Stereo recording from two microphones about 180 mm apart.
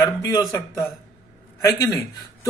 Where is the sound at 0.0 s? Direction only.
20° left (ahead or behind).